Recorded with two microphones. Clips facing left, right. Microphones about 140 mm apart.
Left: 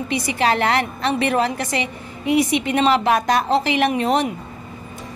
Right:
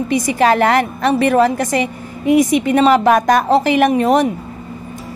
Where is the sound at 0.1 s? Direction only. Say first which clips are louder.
Right 6 dB; 45° right (ahead or behind).